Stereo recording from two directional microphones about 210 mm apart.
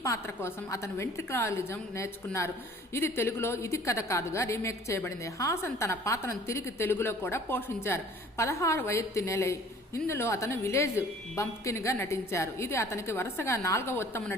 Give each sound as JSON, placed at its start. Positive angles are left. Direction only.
{"t": 0.0, "sound": "a woman's voice", "side_deg": 15}